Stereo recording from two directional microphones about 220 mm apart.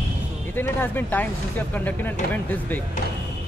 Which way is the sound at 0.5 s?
10° left (ahead or behind).